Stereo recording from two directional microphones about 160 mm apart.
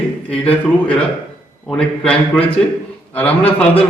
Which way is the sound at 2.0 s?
5° left (ahead or behind).